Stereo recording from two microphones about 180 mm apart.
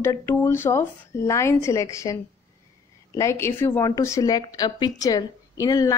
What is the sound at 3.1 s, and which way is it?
A woman's voice, 15° left (ahead or behind).